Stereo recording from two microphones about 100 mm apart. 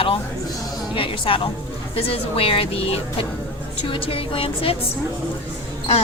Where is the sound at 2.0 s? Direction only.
75° left (ahead or behind).